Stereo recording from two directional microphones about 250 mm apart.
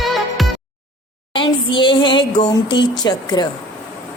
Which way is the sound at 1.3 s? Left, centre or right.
Centre.